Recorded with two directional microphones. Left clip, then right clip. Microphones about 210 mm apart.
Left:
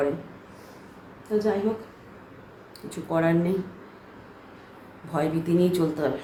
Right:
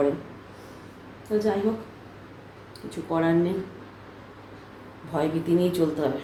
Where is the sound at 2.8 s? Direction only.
15° left (ahead or behind).